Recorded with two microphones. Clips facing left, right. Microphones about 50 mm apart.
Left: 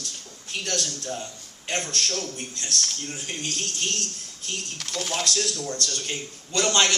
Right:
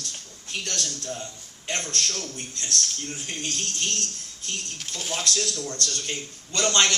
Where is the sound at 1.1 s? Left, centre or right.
Centre.